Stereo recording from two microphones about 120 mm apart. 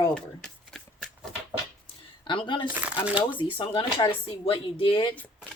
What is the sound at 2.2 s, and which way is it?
Speech, 40° left (ahead or behind).